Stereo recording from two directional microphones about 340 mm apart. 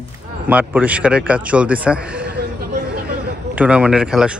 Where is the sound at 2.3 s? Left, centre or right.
Right.